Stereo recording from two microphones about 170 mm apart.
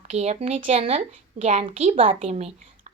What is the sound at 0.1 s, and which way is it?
A woman's voice, 40° right (ahead or behind).